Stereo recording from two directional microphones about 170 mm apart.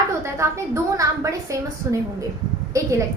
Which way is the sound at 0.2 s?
15° right (ahead or behind).